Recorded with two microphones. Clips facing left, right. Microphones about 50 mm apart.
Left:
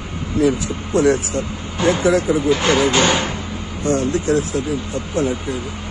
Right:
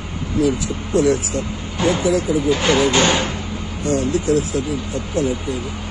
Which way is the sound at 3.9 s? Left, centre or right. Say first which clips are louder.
Right 1 dB; left.